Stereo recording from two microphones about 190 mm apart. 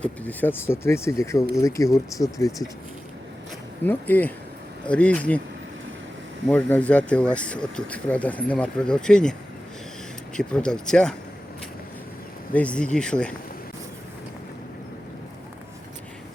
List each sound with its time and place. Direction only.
0.0 s speech: 10° left (ahead or behind)
3.8 s speech: 10° left (ahead or behind)
6.5 s speech: 5° left (ahead or behind)
10.3 s speech: 5° left (ahead or behind)
12.5 s speech: 5° left (ahead or behind)